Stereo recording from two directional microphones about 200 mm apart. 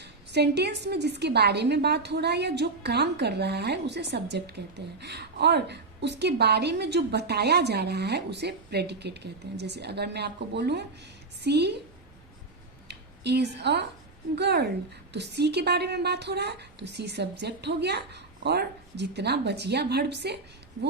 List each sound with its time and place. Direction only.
0.0 s a woman's voice: 55° right (ahead or behind)
12.9 s a woman's voice: 55° right (ahead or behind)